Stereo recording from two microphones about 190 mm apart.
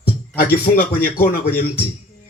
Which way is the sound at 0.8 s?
50° left (ahead or behind).